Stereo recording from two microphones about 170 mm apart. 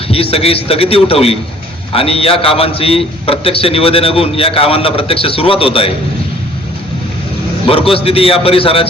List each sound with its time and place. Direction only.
0.1 s a man's voice: 35° left (ahead or behind)
7.7 s a man's voice: 35° left (ahead or behind)